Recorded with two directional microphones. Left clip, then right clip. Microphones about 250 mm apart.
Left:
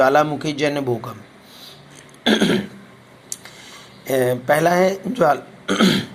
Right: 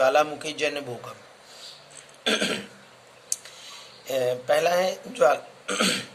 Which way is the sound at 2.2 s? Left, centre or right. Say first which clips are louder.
Left 7 dB; centre.